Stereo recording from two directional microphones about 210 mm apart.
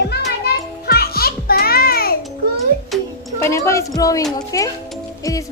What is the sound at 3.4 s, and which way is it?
A child's voice, 15° left (ahead or behind).